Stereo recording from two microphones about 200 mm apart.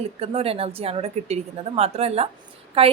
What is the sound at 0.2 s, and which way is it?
A woman's voice, 30° right (ahead or behind).